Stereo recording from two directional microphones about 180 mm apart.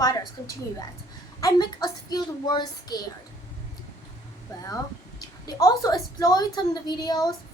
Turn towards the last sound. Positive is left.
turn(degrees=20)  # may be behind; listen again after turning